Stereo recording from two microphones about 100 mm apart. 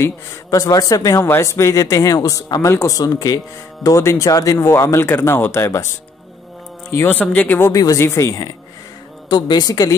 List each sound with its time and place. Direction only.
0.0 s speech: 35° left (ahead or behind)
6.9 s speech: 20° left (ahead or behind)
7.7 s speech: 35° left (ahead or behind)
9.3 s speech: 45° left (ahead or behind)